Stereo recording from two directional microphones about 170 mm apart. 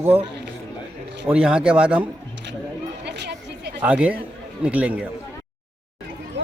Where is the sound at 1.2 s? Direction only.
5° right (ahead or behind).